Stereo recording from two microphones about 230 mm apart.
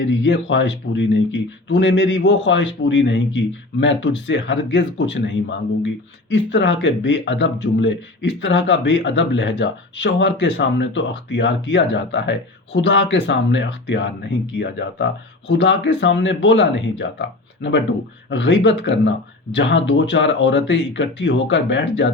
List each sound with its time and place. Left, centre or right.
0.0 s speech: left